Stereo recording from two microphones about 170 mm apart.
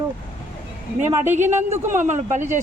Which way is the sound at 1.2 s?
45° right (ahead or behind).